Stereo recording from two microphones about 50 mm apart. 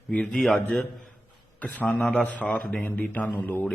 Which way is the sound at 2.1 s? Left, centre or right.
Left.